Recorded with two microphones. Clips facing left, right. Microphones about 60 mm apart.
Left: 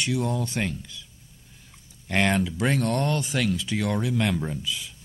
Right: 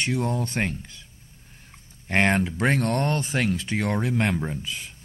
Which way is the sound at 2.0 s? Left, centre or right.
Right.